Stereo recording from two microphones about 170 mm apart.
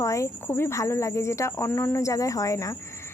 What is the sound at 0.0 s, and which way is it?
A woman's voice, 15° left (ahead or behind).